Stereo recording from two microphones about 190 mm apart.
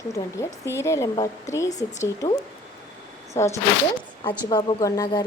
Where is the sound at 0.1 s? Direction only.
15° left (ahead or behind).